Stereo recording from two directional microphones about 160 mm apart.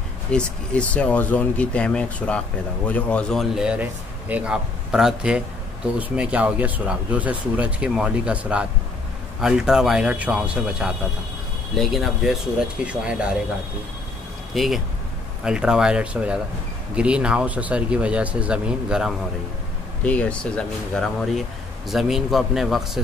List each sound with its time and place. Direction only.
0.3 s speech: 5° left (ahead or behind)
14.5 s speech: centre (ahead or behind)
20.0 s speech: 10° left (ahead or behind)